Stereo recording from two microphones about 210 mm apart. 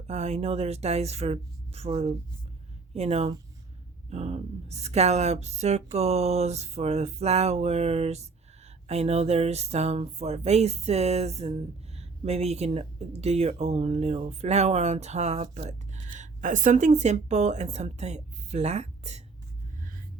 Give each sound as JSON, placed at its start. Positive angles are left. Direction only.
{"t": 0.1, "sound": "speech", "side_deg": -30}